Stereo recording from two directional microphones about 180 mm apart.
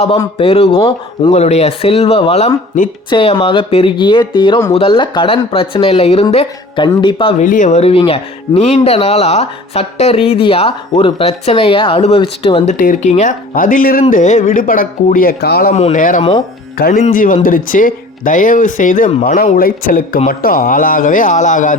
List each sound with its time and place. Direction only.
0.3 s speech: 30° left (ahead or behind)
7.3 s speech: 45° left (ahead or behind)
12.7 s speech: 45° left (ahead or behind); by 15.7 s 60° left (ahead or behind)
15.7 s speech: 40° left (ahead or behind)